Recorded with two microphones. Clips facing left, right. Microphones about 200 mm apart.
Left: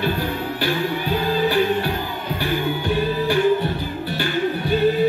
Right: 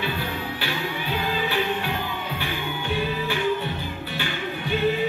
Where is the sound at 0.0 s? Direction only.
40° left (ahead or behind).